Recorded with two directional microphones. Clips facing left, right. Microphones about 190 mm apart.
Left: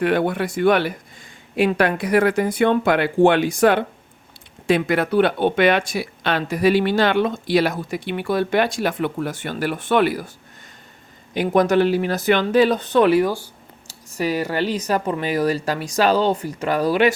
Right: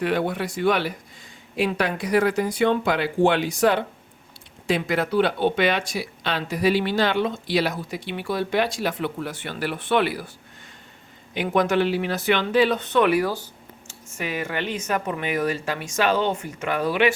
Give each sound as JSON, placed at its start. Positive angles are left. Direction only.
{"t": 0.0, "sound": "speech", "side_deg": 55}
{"t": 11.3, "sound": "speech", "side_deg": 40}
{"t": 13.2, "sound": "speech", "side_deg": 10}
{"t": 13.8, "sound": "speech", "side_deg": 35}